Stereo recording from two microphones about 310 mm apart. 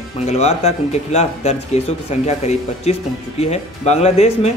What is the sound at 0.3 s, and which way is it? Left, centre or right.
Speech, left.